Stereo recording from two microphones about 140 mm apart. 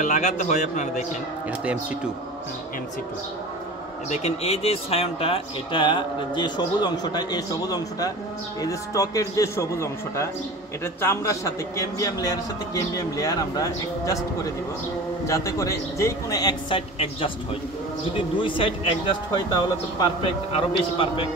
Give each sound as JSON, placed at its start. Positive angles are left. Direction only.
{"t": 0.0, "sound": "a man's voice", "side_deg": 60}
{"t": 4.1, "sound": "a man's voice", "side_deg": 50}
{"t": 16.7, "sound": "speech", "side_deg": 40}
{"t": 18.4, "sound": "speech", "side_deg": 40}
{"t": 20.5, "sound": "speech", "side_deg": 40}